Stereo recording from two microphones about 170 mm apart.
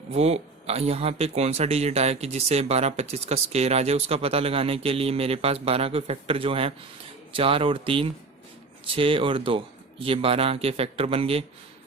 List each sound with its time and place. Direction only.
0.1 s speech: 35° right (ahead or behind)